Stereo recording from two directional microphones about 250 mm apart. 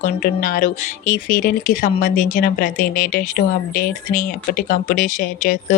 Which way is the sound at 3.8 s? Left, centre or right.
Left.